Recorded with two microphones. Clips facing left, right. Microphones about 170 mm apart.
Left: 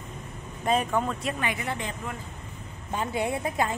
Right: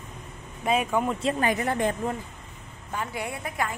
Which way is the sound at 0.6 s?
10° right (ahead or behind).